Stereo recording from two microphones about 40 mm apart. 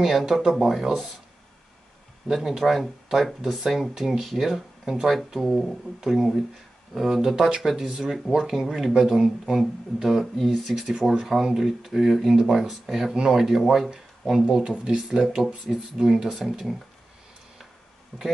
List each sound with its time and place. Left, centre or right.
0.0 s speech: centre
2.3 s speech: centre
5.9 s speech: centre
10.0 s speech: centre
15.4 s speech: centre
18.1 s speech: left